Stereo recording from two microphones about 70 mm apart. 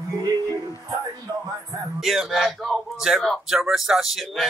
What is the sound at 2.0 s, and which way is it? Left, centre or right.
Speech, centre.